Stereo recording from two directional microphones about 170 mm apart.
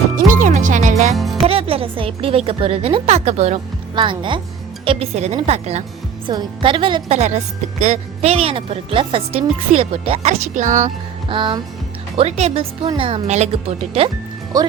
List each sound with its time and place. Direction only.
0.3 s music: 50° right (ahead or behind)
1.1 s music: centre (ahead or behind)
1.5 s a woman's voice: 35° right (ahead or behind)
3.9 s a woman's voice: 30° right (ahead or behind)
10.2 s speech: 45° right (ahead or behind)
11.3 s a woman's voice: 30° right (ahead or behind)
14.5 s speech: 20° right (ahead or behind)